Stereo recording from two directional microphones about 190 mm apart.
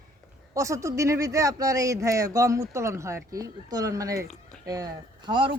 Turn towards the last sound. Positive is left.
turn(degrees=-25)  # may be behind; listen again after turning